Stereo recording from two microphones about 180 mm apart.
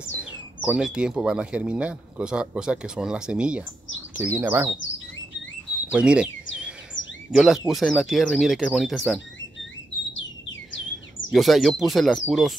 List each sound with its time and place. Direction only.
0.2 s speech: 5° right (ahead or behind)
4.7 s chirp: 90° left
5.9 s speech: 5° right (ahead or behind)
6.5 s chirp: 5° right (ahead or behind)
7.2 s speech: 5° right (ahead or behind)
11.3 s speech: centre (ahead or behind)